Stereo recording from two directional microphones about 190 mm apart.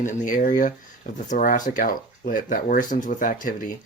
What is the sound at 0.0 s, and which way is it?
Speech, 45° left (ahead or behind).